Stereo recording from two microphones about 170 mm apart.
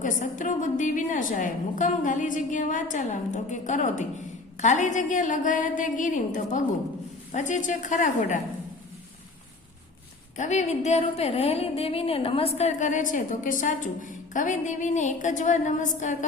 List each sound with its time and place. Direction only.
0.0 s a woman's voice: 50° left (ahead or behind)
10.3 s a woman's voice: 45° left (ahead or behind)